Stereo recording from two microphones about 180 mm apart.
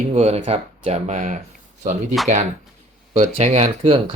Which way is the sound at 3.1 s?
35° right (ahead or behind).